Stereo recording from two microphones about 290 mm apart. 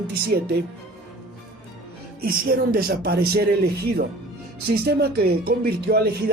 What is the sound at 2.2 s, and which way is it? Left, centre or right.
Speech, right.